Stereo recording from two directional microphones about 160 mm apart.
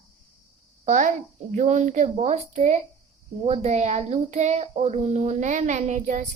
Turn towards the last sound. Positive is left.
turn(degrees=-50)  # may be behind; listen again after turning